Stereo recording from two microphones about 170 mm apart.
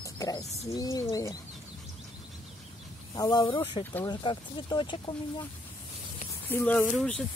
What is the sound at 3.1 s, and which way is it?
Speech, 25° left (ahead or behind).